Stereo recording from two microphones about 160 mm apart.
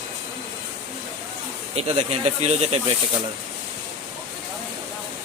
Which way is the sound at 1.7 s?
40° right (ahead or behind).